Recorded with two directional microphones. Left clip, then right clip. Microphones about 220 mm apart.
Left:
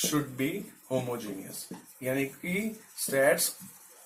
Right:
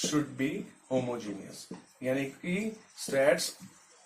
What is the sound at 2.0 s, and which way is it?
Speech, 15° left (ahead or behind).